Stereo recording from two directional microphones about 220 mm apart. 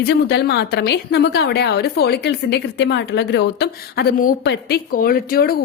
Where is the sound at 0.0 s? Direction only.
50° left (ahead or behind).